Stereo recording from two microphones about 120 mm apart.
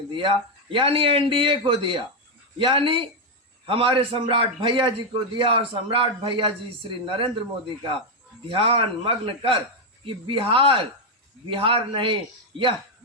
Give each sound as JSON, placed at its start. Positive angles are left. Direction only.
{"t": 0.1, "sound": "a man's voice", "side_deg": -45}
{"t": 8.4, "sound": "a man's voice", "side_deg": -50}